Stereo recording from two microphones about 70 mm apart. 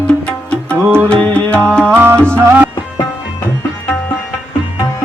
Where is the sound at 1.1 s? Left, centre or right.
Centre.